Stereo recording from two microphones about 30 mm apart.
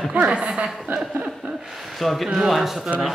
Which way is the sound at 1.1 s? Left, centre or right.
Right.